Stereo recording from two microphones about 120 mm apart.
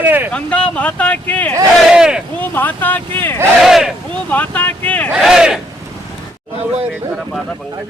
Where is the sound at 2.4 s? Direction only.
15° left (ahead or behind).